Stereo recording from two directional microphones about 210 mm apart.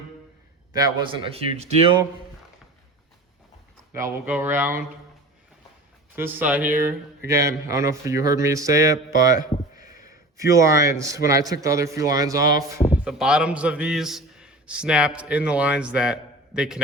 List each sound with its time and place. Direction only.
0.7 s speech: 15° right (ahead or behind)
3.9 s speech: 15° right (ahead or behind)
6.1 s speech: 10° right (ahead or behind)
9.2 s speech: 40° left (ahead or behind)
9.9 s a sound: 40° left (ahead or behind)
10.3 s speech: 15° right (ahead or behind)
12.4 s speech: 45° left (ahead or behind)
12.9 s a man's voice: 5° right (ahead or behind)